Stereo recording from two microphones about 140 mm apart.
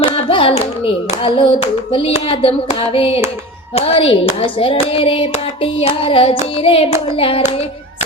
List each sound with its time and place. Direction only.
0.0 s hands: 40° left (ahead or behind)